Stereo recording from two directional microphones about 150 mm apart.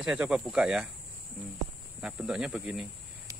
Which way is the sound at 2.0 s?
5° right (ahead or behind).